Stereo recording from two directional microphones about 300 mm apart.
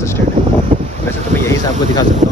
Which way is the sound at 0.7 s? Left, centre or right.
Right.